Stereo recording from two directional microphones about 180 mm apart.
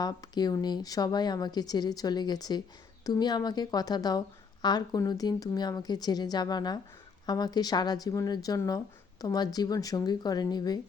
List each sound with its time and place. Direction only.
0.0 s a woman's voice: 20° left (ahead or behind)